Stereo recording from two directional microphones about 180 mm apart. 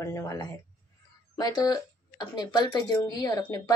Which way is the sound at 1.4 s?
20° left (ahead or behind).